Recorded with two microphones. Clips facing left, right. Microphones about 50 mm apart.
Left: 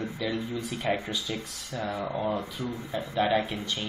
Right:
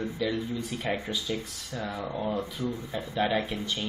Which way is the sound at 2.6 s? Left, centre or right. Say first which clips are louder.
Right 2 dB; left.